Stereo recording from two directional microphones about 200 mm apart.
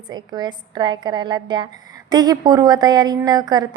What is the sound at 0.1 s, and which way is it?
A woman's voice, 20° right (ahead or behind).